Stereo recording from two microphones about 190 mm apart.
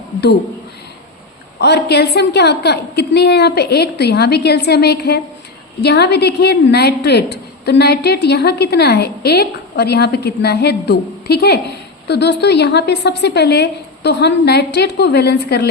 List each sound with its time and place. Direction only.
1.5 s a woman's voice: 60° left (ahead or behind)